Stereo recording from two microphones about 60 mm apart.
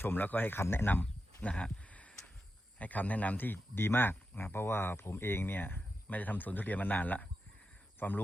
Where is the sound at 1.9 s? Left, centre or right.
Left.